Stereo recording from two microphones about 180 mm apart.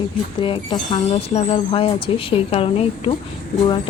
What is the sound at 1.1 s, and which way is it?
Speech, 35° left (ahead or behind).